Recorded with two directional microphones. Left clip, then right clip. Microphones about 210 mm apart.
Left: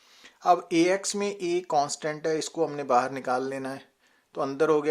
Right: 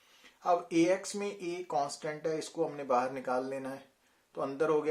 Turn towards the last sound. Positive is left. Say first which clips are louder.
# left 6 dB
turn(degrees=35)  # may be behind; listen again after turning